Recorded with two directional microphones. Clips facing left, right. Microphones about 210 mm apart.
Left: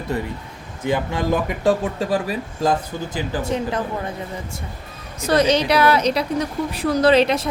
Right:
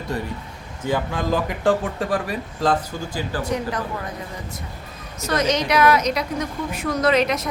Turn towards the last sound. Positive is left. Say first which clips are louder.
# left 4 dB
turn(degrees=30)  # may be behind; listen again after turning